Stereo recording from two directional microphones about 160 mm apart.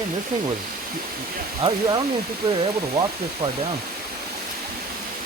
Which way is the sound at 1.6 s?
30° right (ahead or behind).